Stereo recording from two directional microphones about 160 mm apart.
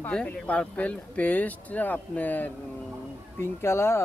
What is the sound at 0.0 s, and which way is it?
Speech, 10° left (ahead or behind).